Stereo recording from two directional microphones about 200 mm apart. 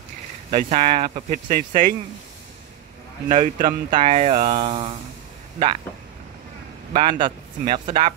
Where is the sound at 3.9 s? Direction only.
35° right (ahead or behind).